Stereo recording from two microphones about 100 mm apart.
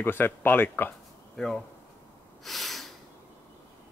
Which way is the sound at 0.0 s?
20° left (ahead or behind).